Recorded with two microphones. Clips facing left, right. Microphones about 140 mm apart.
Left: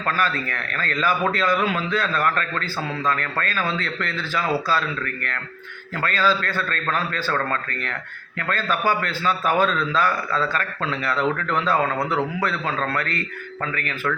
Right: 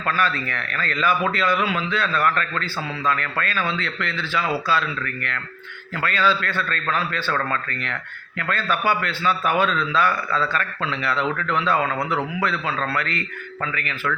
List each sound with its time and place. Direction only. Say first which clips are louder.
0.1 s a man's voice: right 1 dB; 40° left (ahead or behind)
6.0 s a man's voice: even; 40° left (ahead or behind)